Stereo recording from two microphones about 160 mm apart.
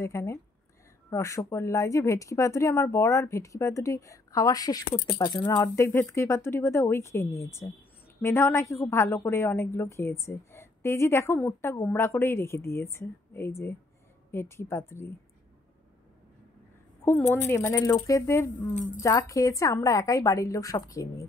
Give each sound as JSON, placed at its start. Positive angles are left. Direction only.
{"t": 0.0, "sound": "a woman's voice", "side_deg": 20}
{"t": 17.0, "sound": "a woman's voice", "side_deg": 15}
{"t": 18.7, "sound": "speech", "side_deg": 50}
{"t": 18.9, "sound": "speech", "side_deg": 20}